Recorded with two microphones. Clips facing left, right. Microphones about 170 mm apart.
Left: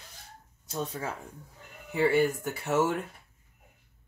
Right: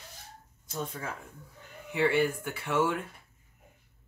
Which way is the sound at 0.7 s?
40° left (ahead or behind).